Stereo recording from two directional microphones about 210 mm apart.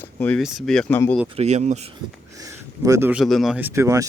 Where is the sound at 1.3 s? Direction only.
30° right (ahead or behind).